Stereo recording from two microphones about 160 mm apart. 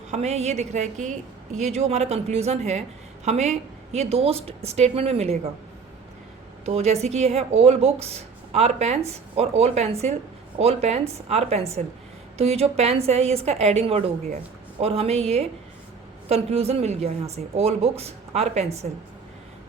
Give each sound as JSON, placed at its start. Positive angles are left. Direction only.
{"t": 0.1, "sound": "a woman's voice", "side_deg": -45}
{"t": 6.7, "sound": "a woman's voice", "side_deg": -45}